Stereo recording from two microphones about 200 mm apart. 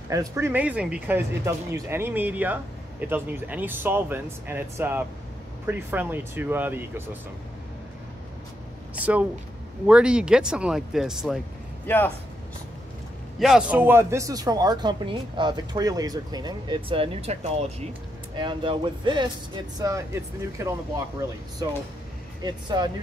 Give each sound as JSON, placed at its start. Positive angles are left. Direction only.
{"t": 0.1, "sound": "speech", "side_deg": -15}
{"t": 8.9, "sound": "speech", "side_deg": -5}
{"t": 11.8, "sound": "a man's voice", "side_deg": 10}
{"t": 13.4, "sound": "speech", "side_deg": -5}